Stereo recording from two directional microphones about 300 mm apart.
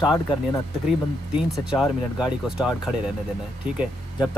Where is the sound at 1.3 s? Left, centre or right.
Centre.